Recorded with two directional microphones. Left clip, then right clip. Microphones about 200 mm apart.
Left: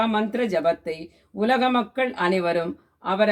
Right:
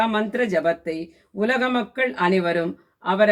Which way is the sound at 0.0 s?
Centre (ahead or behind).